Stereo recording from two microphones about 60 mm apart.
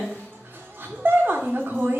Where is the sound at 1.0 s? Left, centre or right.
Right.